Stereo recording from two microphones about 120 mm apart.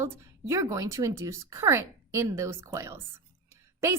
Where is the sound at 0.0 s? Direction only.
20° right (ahead or behind).